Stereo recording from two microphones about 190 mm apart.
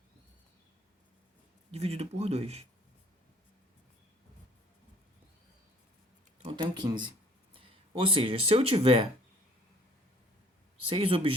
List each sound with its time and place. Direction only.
1.7 s speech: 35° right (ahead or behind)
6.4 s speech: 25° right (ahead or behind)
10.8 s speech: 30° right (ahead or behind)